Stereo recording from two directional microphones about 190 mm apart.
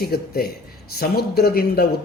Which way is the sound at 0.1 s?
55° left (ahead or behind).